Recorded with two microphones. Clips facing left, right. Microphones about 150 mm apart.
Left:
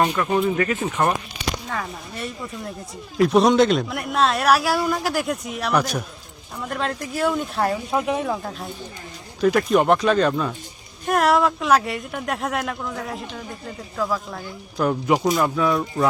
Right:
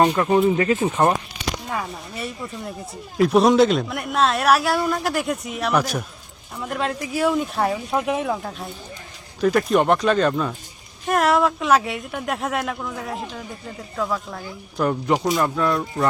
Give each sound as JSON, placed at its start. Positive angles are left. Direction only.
{"t": 0.0, "sound": "speech", "side_deg": -25}
{"t": 1.7, "sound": "speech", "side_deg": -5}